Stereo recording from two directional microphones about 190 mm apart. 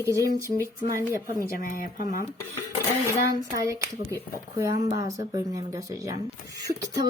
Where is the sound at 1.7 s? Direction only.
45° left (ahead or behind).